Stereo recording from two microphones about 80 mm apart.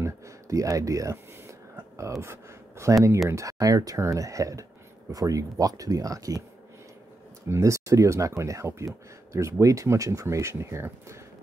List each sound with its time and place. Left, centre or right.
0.0 s speech: right
7.4 s speech: right